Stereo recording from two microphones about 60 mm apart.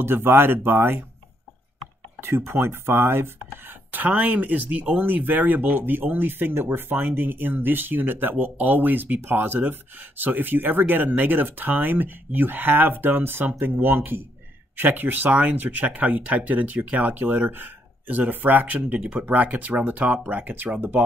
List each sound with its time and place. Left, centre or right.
0.0 s speech: right
2.1 s speech: right
3.6 s speech: right